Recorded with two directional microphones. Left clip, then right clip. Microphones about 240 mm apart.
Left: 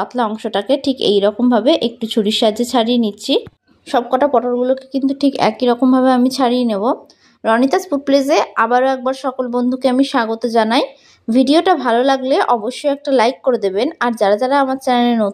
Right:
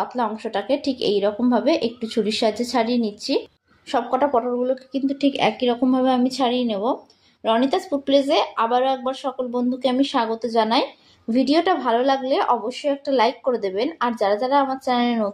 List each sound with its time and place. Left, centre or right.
0.0 s speech: left